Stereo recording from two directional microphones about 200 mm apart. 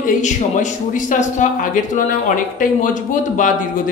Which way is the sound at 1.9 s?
40° left (ahead or behind).